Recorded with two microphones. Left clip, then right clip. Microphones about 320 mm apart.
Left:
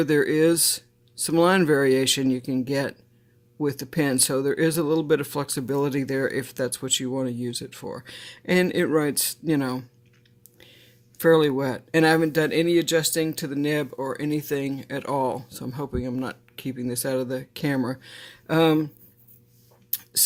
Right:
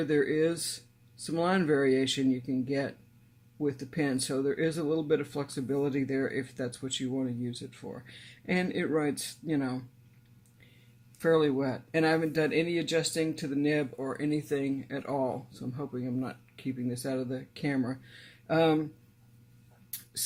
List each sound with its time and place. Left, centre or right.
0.0 s speech: left
11.2 s speech: left